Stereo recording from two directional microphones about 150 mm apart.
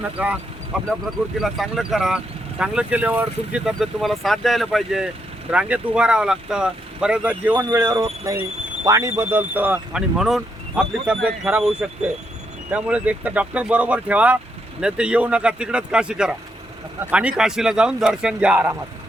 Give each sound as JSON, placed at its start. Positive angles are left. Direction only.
{"t": 0.0, "sound": "speech", "side_deg": -10}